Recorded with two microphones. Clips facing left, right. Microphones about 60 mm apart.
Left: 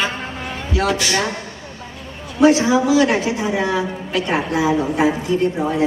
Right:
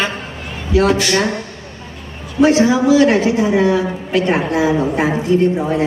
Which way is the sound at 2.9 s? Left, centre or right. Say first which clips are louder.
Right 4 dB; right.